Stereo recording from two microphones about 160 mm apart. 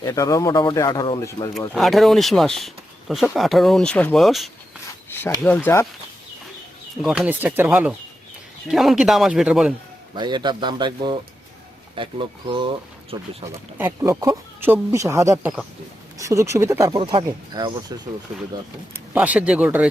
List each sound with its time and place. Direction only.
0.0 s speech: 20° left (ahead or behind)
1.5 s speech: centre (ahead or behind)
5.0 s rub: 15° left (ahead or behind)
5.4 s speech: 10° left (ahead or behind)
7.0 s speech: 5° right (ahead or behind)
10.2 s speech: 30° right (ahead or behind)
13.7 s speech: 15° right (ahead or behind)
17.0 s speech: 30° right (ahead or behind)
18.9 s speech: 10° right (ahead or behind)